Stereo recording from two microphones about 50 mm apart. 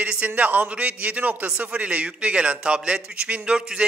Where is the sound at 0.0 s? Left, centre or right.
Right.